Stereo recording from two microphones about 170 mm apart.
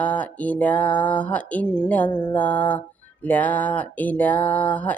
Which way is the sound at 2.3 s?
10° left (ahead or behind).